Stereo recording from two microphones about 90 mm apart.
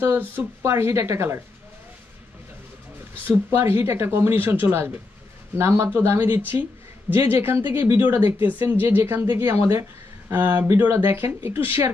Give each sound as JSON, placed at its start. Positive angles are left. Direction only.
{"t": 0.0, "sound": "speech", "side_deg": -25}
{"t": 3.3, "sound": "speech", "side_deg": -25}